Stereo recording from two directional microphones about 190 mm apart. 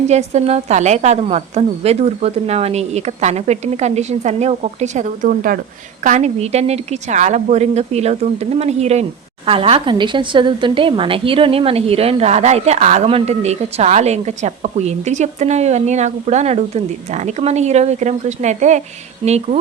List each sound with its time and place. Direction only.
0.1 s a woman's voice: 35° right (ahead or behind)